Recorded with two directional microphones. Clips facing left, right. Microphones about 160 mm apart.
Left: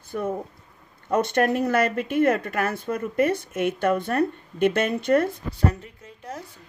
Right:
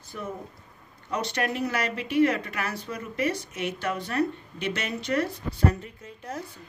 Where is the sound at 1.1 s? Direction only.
50° left (ahead or behind).